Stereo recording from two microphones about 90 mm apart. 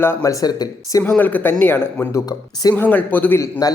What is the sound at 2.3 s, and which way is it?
Speech, 45° left (ahead or behind).